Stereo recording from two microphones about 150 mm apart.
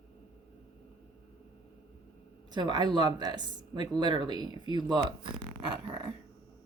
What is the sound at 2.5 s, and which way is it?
Speech, 30° right (ahead or behind).